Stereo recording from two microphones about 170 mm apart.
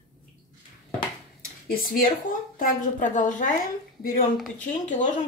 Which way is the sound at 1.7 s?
55° left (ahead or behind).